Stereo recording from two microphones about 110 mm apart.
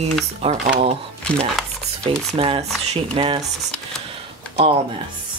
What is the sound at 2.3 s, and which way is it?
Speech, 60° right (ahead or behind).